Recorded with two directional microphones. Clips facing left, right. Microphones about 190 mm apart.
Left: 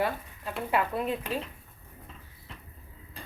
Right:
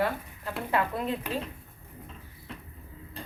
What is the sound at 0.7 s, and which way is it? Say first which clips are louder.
Speech: even; 15° left (ahead or behind).